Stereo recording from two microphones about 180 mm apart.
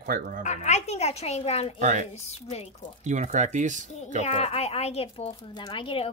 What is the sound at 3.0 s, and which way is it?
Speech, 40° right (ahead or behind).